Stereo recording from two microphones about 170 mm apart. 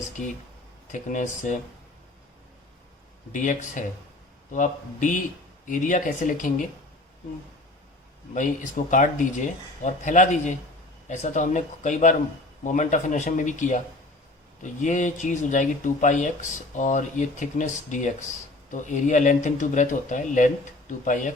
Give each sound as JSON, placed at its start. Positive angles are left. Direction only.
{"t": 0.9, "sound": "speech", "side_deg": 45}
{"t": 3.3, "sound": "speech", "side_deg": 45}
{"t": 8.3, "sound": "speech", "side_deg": 50}